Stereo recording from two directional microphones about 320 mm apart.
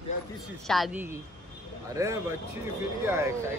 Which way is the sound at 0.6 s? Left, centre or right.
Centre.